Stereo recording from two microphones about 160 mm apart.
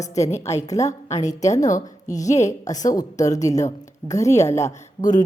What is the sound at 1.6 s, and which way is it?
Speech, 50° left (ahead or behind).